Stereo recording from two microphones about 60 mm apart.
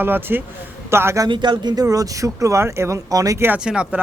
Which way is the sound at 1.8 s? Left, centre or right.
Right.